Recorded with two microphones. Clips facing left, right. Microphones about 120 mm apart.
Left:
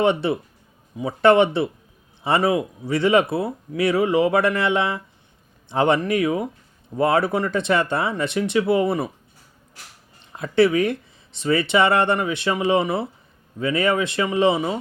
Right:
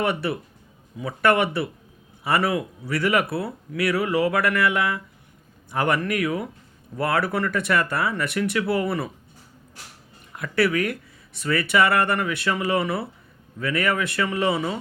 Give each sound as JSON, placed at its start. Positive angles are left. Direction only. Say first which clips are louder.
{"t": 0.0, "sound": "speech", "louder": "left 5 dB", "side_deg": 25}
{"t": 10.3, "sound": "speech", "louder": "left 5 dB", "side_deg": 25}